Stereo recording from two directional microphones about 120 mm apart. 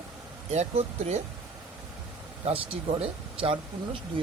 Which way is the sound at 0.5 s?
65° right (ahead or behind).